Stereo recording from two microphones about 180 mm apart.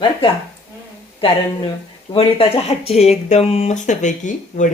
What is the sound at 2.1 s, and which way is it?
Speech, 30° left (ahead or behind).